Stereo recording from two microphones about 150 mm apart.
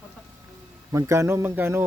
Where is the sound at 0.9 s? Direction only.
20° right (ahead or behind).